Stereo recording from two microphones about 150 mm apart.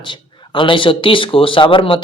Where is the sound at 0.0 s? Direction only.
30° left (ahead or behind).